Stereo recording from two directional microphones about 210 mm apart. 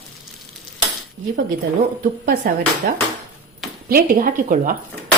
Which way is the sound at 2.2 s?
45° right (ahead or behind).